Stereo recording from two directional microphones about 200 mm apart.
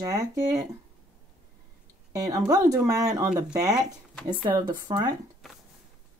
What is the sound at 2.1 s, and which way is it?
Speech, 15° right (ahead or behind).